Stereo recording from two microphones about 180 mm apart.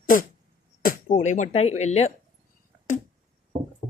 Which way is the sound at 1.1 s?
40° left (ahead or behind).